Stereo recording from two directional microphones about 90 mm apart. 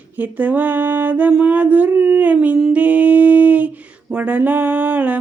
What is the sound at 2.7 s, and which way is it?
Humming, 15° right (ahead or behind).